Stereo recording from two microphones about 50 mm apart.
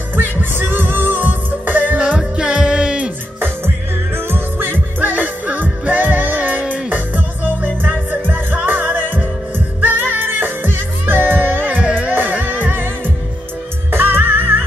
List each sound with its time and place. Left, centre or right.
0.1 s music: right
2.3 s music: centre
3.3 s music: right
8.5 s music: right
13.9 s music: right